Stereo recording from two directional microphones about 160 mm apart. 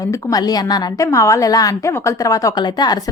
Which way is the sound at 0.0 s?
20° left (ahead or behind).